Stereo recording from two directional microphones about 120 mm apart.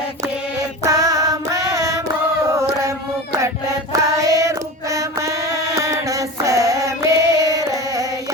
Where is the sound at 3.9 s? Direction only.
25° right (ahead or behind).